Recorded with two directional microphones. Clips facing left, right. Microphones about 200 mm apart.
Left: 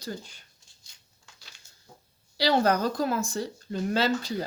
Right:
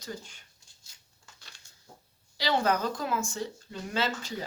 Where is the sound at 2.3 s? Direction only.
40° left (ahead or behind).